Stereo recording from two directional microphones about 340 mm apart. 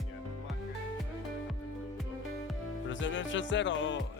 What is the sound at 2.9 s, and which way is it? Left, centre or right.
Music, left.